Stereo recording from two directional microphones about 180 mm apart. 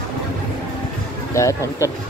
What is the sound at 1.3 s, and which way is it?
Speech, 15° left (ahead or behind).